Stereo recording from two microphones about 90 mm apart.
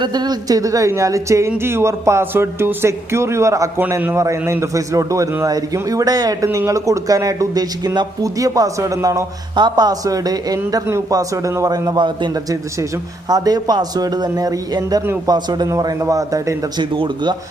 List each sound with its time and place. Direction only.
0.0 s speech: 50° right (ahead or behind); by 3.7 s 35° right (ahead or behind)
3.8 s speech: 25° right (ahead or behind)
9.6 s a man's voice: 55° right (ahead or behind)
12.5 s a man's voice: 45° right (ahead or behind)
16.7 s speech: 65° right (ahead or behind)